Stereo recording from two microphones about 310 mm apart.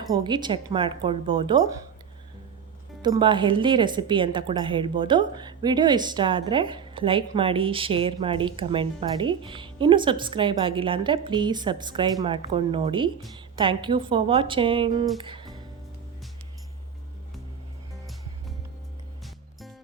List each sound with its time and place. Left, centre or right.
0.1 s speech: centre
3.0 s speech: centre
15.2 s music: centre